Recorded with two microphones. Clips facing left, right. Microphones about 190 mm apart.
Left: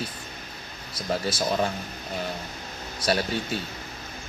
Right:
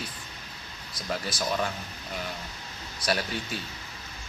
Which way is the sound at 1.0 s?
30° left (ahead or behind).